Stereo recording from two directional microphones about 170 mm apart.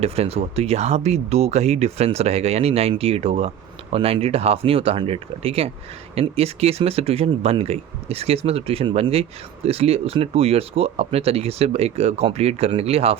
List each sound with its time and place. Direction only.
0.0 s speech: 35° right (ahead or behind)